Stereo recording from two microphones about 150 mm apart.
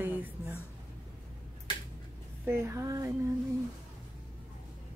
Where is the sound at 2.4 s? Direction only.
20° right (ahead or behind).